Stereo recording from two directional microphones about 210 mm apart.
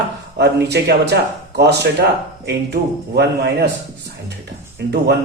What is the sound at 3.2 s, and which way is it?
Speech, 50° right (ahead or behind).